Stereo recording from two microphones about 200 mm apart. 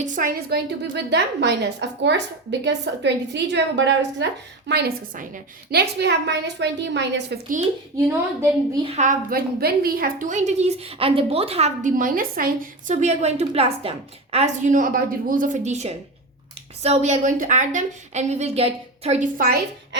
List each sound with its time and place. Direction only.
0.0 s a woman's voice: 40° right (ahead or behind)
0.5 s a woman's voice: 60° right (ahead or behind)
4.7 s a woman's voice: 45° right (ahead or behind)
8.8 s a woman's voice: 40° right (ahead or behind)